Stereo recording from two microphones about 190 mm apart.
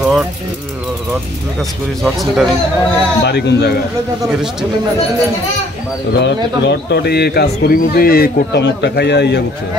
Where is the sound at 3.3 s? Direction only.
60° left (ahead or behind).